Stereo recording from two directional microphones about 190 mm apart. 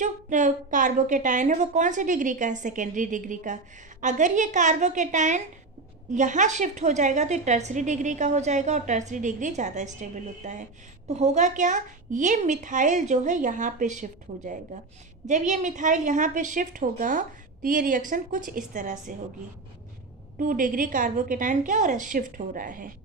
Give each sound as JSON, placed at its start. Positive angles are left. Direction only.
{"t": 0.0, "sound": "a woman's voice", "side_deg": -40}
{"t": 20.3, "sound": "a woman's voice", "side_deg": -45}